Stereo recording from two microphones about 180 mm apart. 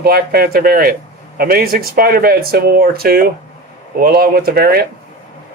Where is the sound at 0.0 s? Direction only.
60° right (ahead or behind).